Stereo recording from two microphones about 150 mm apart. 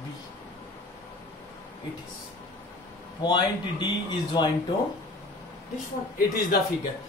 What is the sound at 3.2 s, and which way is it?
Speech, 30° left (ahead or behind).